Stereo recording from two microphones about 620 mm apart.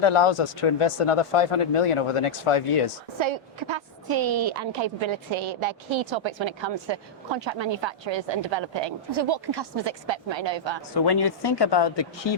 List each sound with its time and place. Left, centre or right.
0.0 s speech: left
3.2 s a woman's voice: right
10.9 s speech: left